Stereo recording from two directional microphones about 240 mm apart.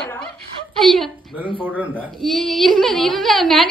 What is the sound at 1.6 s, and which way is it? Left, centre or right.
A woman's voice, centre.